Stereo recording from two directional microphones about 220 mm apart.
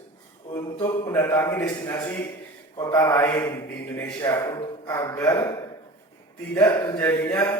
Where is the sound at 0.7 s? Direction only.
25° left (ahead or behind).